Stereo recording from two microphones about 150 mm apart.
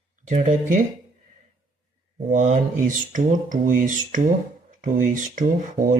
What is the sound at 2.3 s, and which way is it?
Speech, 55° right (ahead or behind).